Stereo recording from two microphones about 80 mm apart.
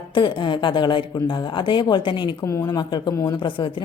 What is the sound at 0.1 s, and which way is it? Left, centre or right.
Speech, left.